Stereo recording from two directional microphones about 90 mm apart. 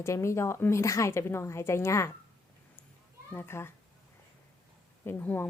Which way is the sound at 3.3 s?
25° left (ahead or behind).